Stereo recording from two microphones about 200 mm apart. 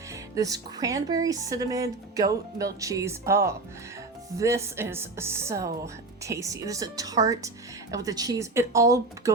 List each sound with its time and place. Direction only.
0.1 s speech: 15° right (ahead or behind)